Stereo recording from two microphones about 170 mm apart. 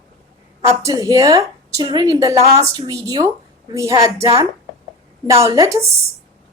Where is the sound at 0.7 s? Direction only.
20° right (ahead or behind).